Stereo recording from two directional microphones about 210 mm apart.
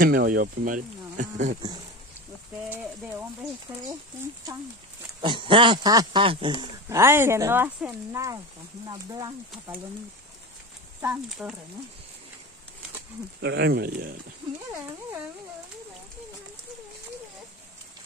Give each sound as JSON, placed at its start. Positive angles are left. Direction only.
{"t": 0.0, "sound": "speech", "side_deg": -45}
{"t": 2.7, "sound": "speech", "side_deg": -10}
{"t": 5.2, "sound": "speech", "side_deg": -25}
{"t": 11.0, "sound": "speech", "side_deg": -5}
{"t": 13.4, "sound": "speech", "side_deg": -55}